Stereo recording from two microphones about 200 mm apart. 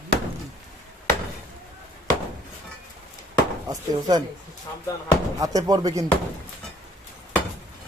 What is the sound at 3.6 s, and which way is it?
Speech, 20° right (ahead or behind).